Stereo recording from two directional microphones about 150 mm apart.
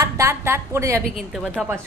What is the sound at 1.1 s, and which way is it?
Speech, centre (ahead or behind).